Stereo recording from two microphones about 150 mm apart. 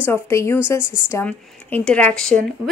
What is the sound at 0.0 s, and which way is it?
Speech, 15° left (ahead or behind).